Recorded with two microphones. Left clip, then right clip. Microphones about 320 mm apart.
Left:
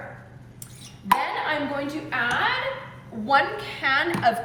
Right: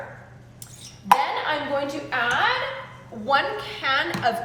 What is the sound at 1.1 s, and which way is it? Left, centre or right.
Speech, centre.